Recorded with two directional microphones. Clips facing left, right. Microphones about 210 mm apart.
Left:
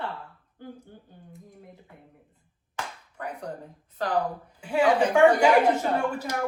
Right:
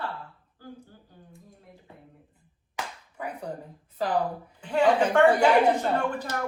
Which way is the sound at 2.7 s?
5° right (ahead or behind).